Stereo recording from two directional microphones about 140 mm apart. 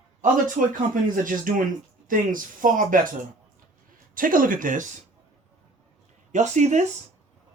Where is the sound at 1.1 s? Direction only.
75° right (ahead or behind).